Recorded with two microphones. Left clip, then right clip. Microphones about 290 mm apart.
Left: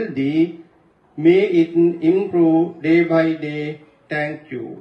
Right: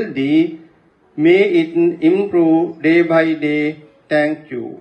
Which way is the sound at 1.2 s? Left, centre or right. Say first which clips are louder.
Right 2 dB; right.